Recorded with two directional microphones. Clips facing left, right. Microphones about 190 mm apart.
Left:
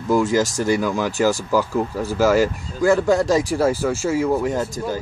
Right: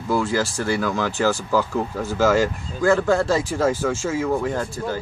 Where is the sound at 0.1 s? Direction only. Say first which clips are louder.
Left 4 dB; 15° left (ahead or behind).